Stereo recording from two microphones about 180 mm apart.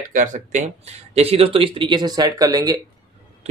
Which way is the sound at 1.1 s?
35° right (ahead or behind).